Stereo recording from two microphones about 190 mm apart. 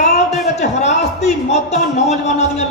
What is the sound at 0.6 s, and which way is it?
A man's voice, 35° left (ahead or behind).